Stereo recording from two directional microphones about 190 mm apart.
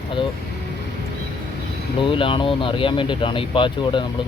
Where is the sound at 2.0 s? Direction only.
25° left (ahead or behind).